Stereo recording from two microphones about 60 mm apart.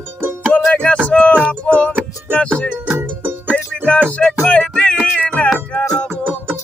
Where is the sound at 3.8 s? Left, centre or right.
Left.